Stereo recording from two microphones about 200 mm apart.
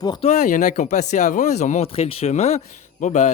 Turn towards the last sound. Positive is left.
turn(degrees=35)  # may be behind; listen again after turning